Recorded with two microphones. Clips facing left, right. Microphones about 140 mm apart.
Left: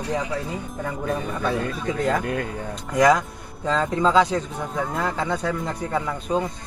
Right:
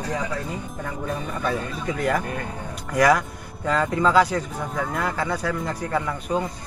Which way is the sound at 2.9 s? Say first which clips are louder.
Left 1 dB; 20° left (ahead or behind).